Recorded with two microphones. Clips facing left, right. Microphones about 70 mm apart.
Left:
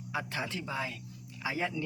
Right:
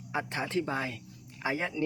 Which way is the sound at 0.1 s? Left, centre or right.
Right.